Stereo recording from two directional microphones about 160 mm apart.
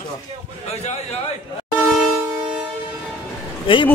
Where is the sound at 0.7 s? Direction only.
40° left (ahead or behind).